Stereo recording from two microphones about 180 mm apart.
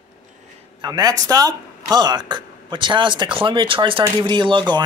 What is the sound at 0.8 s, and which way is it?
Speech, 20° right (ahead or behind).